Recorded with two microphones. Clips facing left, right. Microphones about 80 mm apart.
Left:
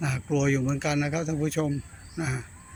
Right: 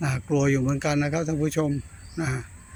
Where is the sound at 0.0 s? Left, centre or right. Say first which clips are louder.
Right 3 dB; centre.